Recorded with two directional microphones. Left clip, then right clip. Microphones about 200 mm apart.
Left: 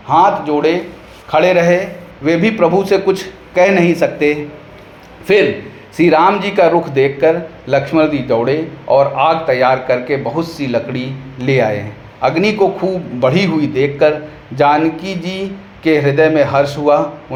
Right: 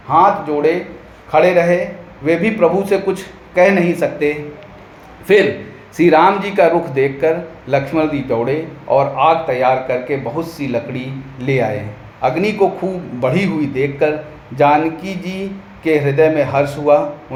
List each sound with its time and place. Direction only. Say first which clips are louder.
0.1 s a man's voice: left 1 dB; 20° left (ahead or behind)